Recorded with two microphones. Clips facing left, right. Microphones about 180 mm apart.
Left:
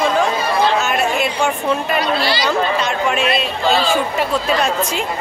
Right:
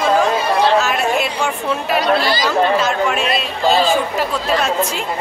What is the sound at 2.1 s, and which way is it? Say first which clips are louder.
Speech: right 2 dB; 45° right (ahead or behind).